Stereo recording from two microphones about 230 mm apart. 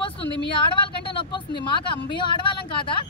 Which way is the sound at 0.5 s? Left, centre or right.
Left.